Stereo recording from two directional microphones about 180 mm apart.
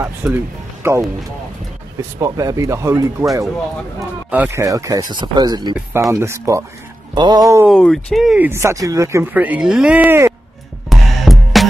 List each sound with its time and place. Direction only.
0.0 s speech: 10° right (ahead or behind)
2.1 s speech: 20° right (ahead or behind)
4.3 s speech: 10° right (ahead or behind)
7.7 s speech: centre (ahead or behind)
8.5 s speech: 15° right (ahead or behind)
10.9 s music: centre (ahead or behind)